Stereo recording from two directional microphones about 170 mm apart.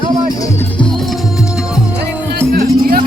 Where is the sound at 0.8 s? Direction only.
Centre (ahead or behind).